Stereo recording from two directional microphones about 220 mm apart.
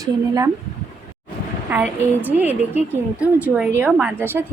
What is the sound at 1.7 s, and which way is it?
A woman's voice, 10° right (ahead or behind).